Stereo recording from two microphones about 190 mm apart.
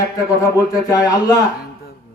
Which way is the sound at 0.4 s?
20° left (ahead or behind).